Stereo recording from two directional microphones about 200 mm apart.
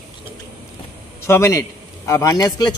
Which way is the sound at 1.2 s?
15° left (ahead or behind).